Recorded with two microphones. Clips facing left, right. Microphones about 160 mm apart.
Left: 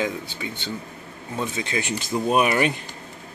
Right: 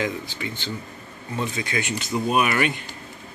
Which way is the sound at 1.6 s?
30° left (ahead or behind).